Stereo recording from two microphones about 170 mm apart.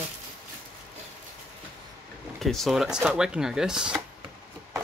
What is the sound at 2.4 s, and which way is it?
Speech, centre (ahead or behind).